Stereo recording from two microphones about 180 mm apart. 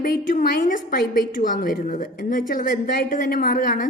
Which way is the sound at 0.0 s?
50° left (ahead or behind).